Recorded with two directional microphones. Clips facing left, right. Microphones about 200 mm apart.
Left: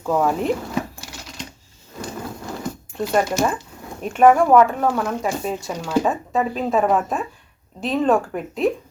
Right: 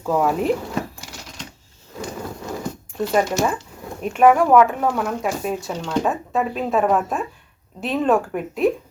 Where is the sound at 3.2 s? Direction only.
Centre (ahead or behind).